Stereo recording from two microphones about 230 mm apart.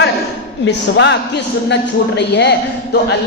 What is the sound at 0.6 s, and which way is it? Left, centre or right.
A man's voice, left.